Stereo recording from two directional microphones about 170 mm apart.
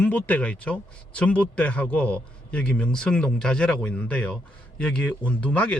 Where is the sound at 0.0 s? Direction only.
10° left (ahead or behind).